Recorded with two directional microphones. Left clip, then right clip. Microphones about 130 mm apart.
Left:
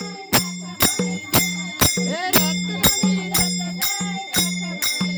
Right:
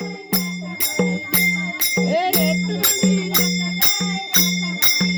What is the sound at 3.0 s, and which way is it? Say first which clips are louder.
Music: right 2 dB; 45° right (ahead or behind).